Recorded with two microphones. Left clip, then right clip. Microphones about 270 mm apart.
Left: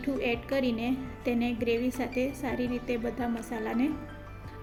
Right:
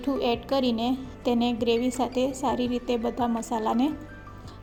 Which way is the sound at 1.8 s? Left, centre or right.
Centre.